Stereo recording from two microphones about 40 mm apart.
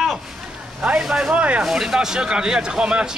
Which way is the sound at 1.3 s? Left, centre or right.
Right.